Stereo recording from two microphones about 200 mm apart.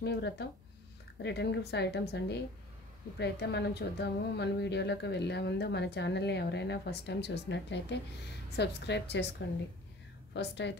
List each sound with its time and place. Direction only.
0.0 s a woman's voice: 55° left (ahead or behind)
10.3 s a woman's voice: 60° left (ahead or behind)